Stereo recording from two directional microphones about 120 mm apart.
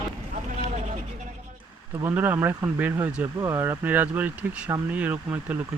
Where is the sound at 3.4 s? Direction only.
25° right (ahead or behind).